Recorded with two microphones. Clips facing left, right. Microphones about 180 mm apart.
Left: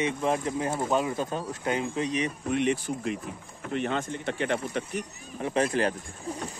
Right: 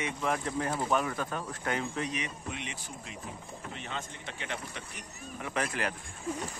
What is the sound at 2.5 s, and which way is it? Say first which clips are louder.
Speech: left 14 dB; 50° left (ahead or behind).